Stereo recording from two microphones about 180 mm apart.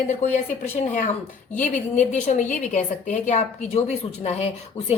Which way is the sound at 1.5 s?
45° left (ahead or behind).